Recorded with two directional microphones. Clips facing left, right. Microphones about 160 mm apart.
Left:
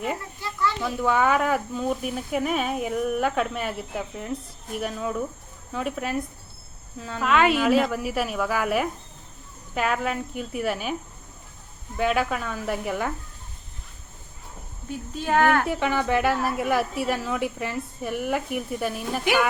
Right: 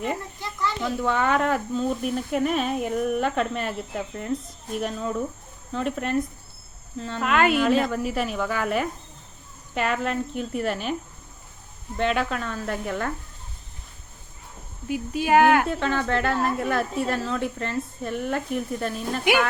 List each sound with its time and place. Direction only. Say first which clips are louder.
0.4 s snake: left 2 dB; 20° right (ahead or behind)
1.0 s speech: left 2 dB; 5° left (ahead or behind)
11.9 s a woman's voice: left 1 dB; 5° left (ahead or behind)
14.8 s speech: right 4 dB; 10° right (ahead or behind)
15.6 s a woman's voice: left 1 dB; 15° left (ahead or behind)